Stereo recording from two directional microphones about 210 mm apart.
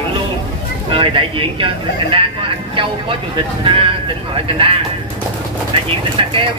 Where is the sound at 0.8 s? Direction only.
25° right (ahead or behind).